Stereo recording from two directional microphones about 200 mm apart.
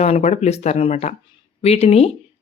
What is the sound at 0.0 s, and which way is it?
Speech, 35° left (ahead or behind).